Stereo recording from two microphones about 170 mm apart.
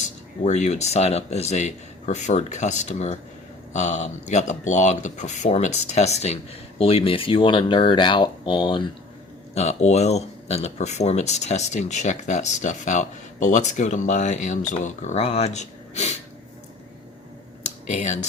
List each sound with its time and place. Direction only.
0.0 s speech: 45° left (ahead or behind); by 8.9 s 30° left (ahead or behind)
9.6 s speech: 40° left (ahead or behind)
17.6 s computer keyboard: 45° left (ahead or behind)